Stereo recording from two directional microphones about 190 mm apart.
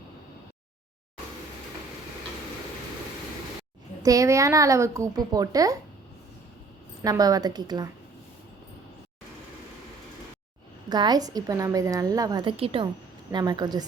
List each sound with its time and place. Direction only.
4.0 s a woman's voice: 15° right (ahead or behind)
7.0 s a woman's voice: 20° right (ahead or behind)
10.8 s a woman's voice: 20° right (ahead or behind)